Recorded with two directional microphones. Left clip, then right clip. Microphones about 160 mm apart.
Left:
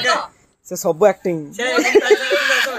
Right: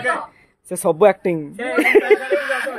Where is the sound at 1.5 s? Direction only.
10° left (ahead or behind).